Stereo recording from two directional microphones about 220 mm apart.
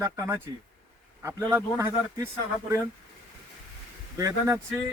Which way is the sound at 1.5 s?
15° right (ahead or behind).